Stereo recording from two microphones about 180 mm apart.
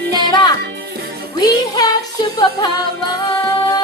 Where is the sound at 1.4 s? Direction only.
20° left (ahead or behind).